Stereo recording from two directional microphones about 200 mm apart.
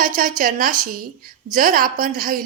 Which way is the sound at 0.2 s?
45° right (ahead or behind).